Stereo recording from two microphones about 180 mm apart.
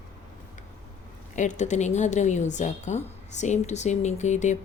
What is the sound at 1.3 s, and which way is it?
A woman's voice, 40° left (ahead or behind).